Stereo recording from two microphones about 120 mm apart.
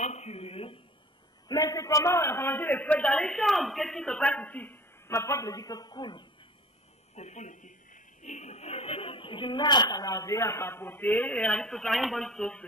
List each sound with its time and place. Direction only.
0.0 s a sound: 65° left (ahead or behind)
1.5 s a man's voice: 30° left (ahead or behind)
7.2 s a woman's voice: 75° left (ahead or behind); by 12.6 s 5° left (ahead or behind)